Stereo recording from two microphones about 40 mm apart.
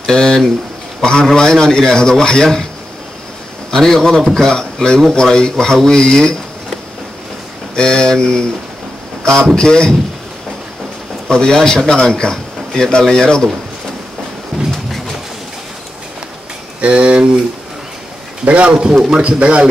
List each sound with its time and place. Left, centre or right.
0.0 s a man's voice: centre
3.7 s a man's voice: centre
7.7 s a man's voice: centre
11.2 s a man's voice: centre
14.5 s train: centre
16.8 s speech: right
18.4 s a man's voice: right